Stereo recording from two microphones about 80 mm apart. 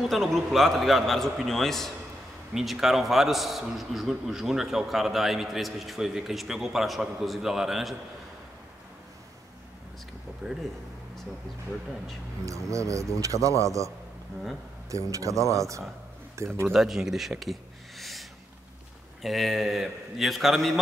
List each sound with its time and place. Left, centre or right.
0.1 s a man's voice: centre
12.4 s speech: right
16.6 s speech: centre
19.2 s a man's voice: centre